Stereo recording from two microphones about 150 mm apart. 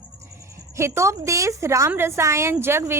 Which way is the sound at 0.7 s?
20° right (ahead or behind).